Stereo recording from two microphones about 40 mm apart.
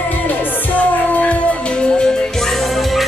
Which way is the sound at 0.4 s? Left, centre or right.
Left.